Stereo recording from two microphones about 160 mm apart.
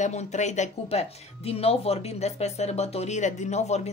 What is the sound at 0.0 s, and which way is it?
Speech, 45° left (ahead or behind).